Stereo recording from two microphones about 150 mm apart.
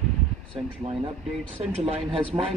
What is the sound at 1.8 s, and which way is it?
Speech, 40° right (ahead or behind).